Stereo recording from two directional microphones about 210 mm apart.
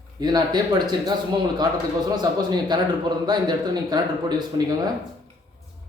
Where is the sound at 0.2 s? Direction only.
20° right (ahead or behind).